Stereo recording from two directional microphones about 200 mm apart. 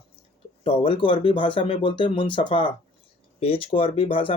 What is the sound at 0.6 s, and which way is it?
Speech, 30° left (ahead or behind).